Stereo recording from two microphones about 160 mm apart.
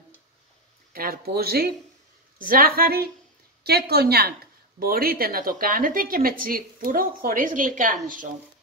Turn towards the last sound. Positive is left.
turn(degrees=-55)  # may be behind; listen again after turning